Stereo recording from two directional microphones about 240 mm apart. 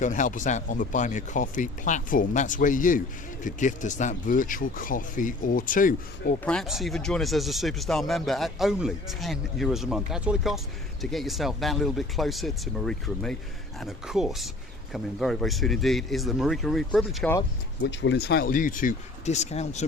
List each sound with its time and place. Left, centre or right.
0.0 s speech: left
6.4 s speech: centre
17.8 s speech: left